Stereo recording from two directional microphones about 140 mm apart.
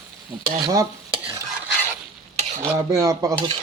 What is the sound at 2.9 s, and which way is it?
Speech, 25° right (ahead or behind).